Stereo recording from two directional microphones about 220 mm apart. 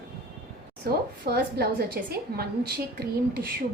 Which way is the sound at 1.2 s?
45° right (ahead or behind).